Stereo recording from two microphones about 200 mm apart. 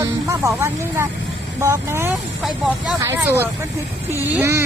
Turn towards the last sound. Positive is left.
turn(degrees=-10)  # may be behind; listen again after turning